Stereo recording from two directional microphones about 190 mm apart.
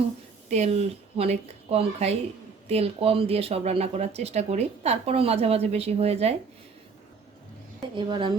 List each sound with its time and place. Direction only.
0.5 s speech: 35° right (ahead or behind)
7.9 s speech: 25° right (ahead or behind)